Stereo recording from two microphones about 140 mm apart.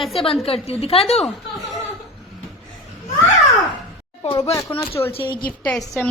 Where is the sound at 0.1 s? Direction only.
40° left (ahead or behind).